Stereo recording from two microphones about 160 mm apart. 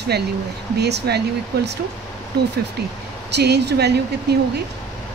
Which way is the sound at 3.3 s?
90° right.